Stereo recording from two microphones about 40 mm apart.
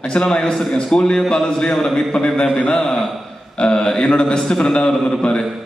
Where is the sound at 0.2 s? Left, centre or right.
Centre.